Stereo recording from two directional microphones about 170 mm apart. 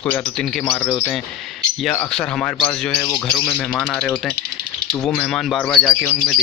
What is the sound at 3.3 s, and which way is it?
Speech, 5° left (ahead or behind).